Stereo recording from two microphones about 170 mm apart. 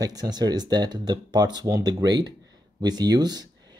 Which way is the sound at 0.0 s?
25° right (ahead or behind).